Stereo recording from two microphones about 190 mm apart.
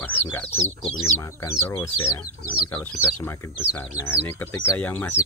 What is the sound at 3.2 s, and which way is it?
Speech, 10° left (ahead or behind).